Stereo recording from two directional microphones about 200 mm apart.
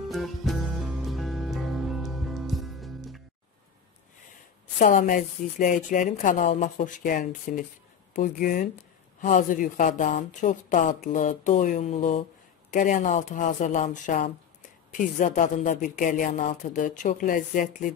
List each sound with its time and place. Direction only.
0.1 s music: centre (ahead or behind)
4.7 s speech: 40° left (ahead or behind)